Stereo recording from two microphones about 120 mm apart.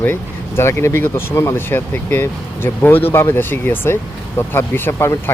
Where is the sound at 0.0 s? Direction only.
20° left (ahead or behind).